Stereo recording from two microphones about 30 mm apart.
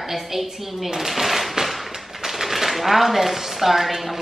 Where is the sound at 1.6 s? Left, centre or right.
Centre.